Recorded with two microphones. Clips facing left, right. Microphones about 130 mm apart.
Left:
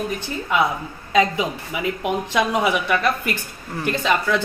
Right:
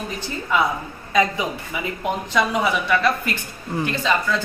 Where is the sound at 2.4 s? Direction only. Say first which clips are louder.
Even; 10° left (ahead or behind).